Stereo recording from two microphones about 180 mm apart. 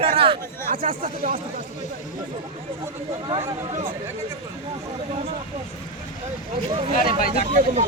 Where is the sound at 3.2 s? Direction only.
20° right (ahead or behind).